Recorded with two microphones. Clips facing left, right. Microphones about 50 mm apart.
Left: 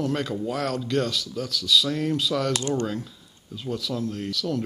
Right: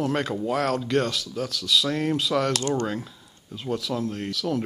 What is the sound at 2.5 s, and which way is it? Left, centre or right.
Speech, centre.